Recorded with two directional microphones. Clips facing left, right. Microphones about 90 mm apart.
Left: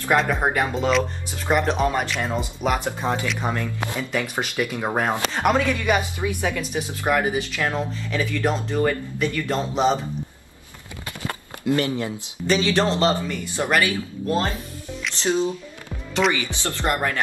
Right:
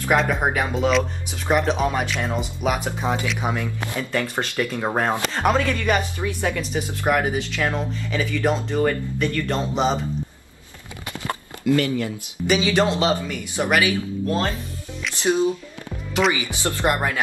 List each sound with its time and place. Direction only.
0.0 s speech: centre (ahead or behind)
4.1 s speech: 5° left (ahead or behind)
11.6 s speech: 25° left (ahead or behind)
12.4 s speech: 10° right (ahead or behind)
15.1 s speech: 15° right (ahead or behind)
16.2 s speech: centre (ahead or behind)
16.5 s speech: 15° right (ahead or behind)